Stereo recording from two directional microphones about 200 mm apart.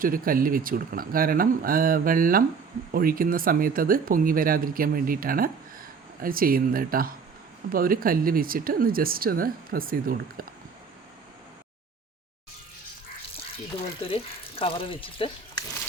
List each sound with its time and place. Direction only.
0.0 s speech: 45° right (ahead or behind)
14.1 s speech: 25° left (ahead or behind)